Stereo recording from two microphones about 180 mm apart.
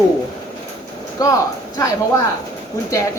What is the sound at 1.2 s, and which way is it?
Speech, 20° left (ahead or behind).